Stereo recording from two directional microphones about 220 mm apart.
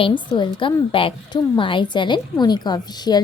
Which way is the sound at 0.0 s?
20° left (ahead or behind).